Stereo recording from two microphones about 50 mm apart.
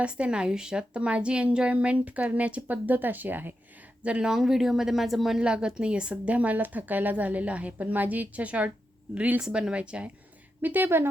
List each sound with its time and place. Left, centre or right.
0.0 s a woman's voice: right
4.0 s a woman's voice: right
4.3 s speech: centre
5.4 s a woman's voice: centre
9.4 s a woman's voice: centre
10.6 s speech: right